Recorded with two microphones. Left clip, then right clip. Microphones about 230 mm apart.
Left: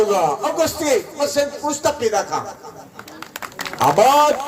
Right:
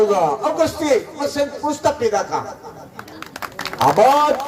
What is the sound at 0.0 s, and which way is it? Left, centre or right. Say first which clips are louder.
Speech: right 1 dB; left.